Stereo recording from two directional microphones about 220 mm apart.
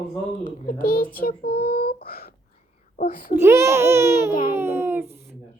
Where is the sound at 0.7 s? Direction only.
40° left (ahead or behind).